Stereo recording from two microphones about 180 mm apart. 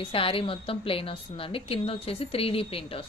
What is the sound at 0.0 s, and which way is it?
A woman's voice, 30° left (ahead or behind).